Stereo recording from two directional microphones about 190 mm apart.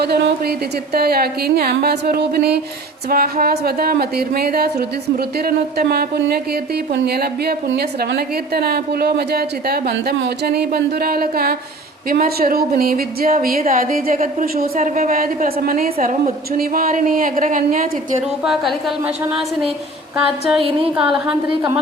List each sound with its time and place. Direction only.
0.0 s a woman's voice: 55° right (ahead or behind)
18.4 s a woman's voice: centre (ahead or behind)
20.9 s a woman's voice: 5° right (ahead or behind)